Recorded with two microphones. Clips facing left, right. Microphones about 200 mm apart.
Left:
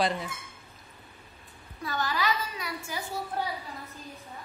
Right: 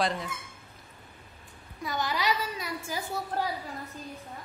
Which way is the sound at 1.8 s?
20° right (ahead or behind).